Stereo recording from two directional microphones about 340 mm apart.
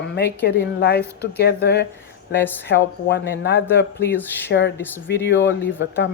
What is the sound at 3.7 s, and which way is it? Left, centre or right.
Speech, centre.